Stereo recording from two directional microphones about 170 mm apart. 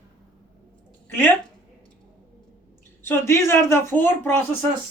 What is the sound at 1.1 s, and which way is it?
Speech, 10° left (ahead or behind).